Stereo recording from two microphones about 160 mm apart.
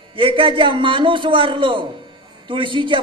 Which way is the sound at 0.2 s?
35° right (ahead or behind).